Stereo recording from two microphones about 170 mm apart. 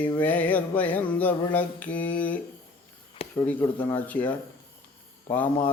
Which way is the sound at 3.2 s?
35° left (ahead or behind).